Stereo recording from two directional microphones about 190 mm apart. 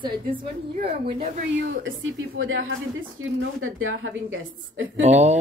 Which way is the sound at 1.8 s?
90° right.